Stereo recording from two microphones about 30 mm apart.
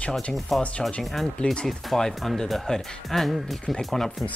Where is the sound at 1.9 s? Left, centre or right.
Centre.